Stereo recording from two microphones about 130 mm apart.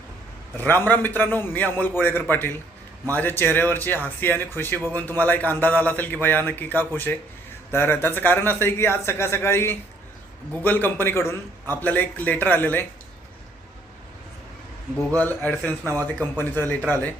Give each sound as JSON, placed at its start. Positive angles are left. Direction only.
{"t": 0.5, "sound": "a man's voice", "side_deg": 15}
{"t": 15.2, "sound": "a man's voice", "side_deg": 15}